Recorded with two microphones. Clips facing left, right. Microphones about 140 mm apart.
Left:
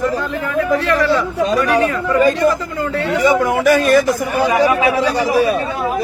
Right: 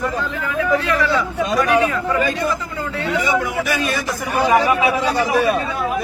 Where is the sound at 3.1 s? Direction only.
50° left (ahead or behind).